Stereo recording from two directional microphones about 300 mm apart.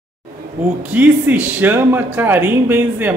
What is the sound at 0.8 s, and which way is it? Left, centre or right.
Speech, centre.